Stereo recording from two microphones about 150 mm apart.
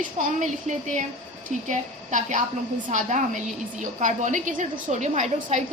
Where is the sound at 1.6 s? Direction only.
55° right (ahead or behind).